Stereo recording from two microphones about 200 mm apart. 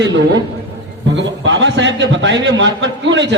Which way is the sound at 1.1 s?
65° right (ahead or behind).